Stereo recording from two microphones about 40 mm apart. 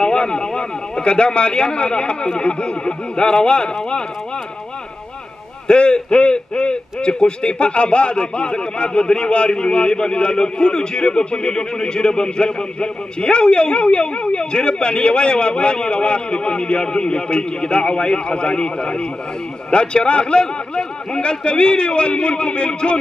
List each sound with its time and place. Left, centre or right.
0.0 s a man's voice: left
5.7 s a man's voice: left